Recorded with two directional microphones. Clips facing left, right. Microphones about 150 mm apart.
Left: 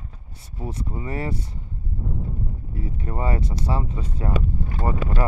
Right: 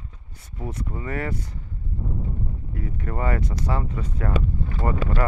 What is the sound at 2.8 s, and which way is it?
Speech, 30° left (ahead or behind).